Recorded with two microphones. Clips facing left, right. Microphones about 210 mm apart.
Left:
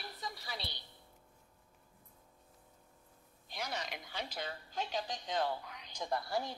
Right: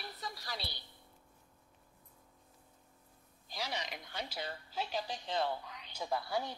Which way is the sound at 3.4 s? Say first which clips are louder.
Even; 5° right (ahead or behind).